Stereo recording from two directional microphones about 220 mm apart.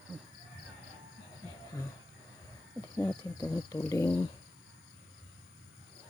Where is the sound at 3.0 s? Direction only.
15° left (ahead or behind).